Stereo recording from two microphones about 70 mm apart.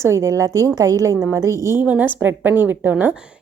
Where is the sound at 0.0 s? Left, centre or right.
Right.